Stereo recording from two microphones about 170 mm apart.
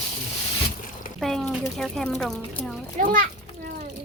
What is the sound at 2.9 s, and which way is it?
Speech, 55° right (ahead or behind).